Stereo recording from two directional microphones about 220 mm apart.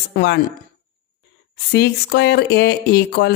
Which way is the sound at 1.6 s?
50° left (ahead or behind).